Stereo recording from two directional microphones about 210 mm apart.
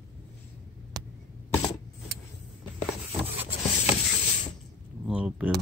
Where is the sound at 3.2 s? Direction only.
10° right (ahead or behind).